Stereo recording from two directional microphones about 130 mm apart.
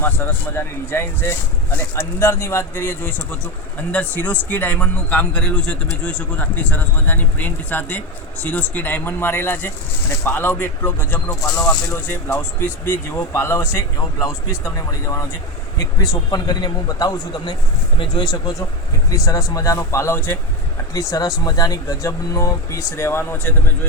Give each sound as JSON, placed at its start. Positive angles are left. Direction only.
{"t": 0.0, "sound": "speech", "side_deg": 15}